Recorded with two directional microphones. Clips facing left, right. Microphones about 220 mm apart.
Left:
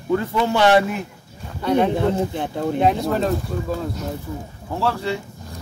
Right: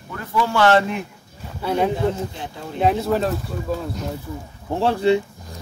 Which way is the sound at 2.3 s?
55° left (ahead or behind).